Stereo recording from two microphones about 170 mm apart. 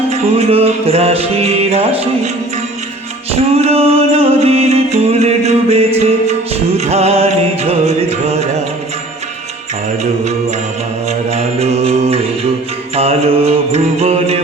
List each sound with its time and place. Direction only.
0.1 s music: 40° right (ahead or behind)
3.3 s music: 35° right (ahead or behind)
11.3 s mantra: 40° right (ahead or behind)
13.0 s music: 35° right (ahead or behind)